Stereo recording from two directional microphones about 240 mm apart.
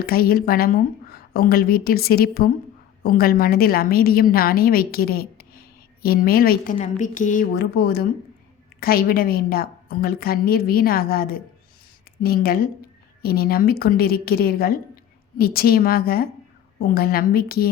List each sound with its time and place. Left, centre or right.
0.0 s a woman's voice: left